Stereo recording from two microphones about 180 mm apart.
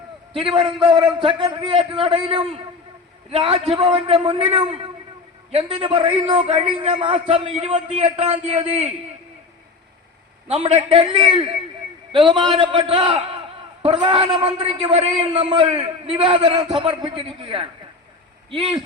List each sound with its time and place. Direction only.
0.3 s a man's voice: 30° right (ahead or behind)
10.5 s a man's voice: 35° right (ahead or behind)